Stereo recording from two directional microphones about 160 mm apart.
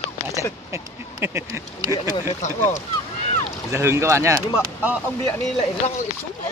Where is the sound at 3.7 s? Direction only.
20° right (ahead or behind).